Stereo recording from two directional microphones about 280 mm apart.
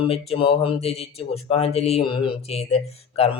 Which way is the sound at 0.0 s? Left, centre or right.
Left.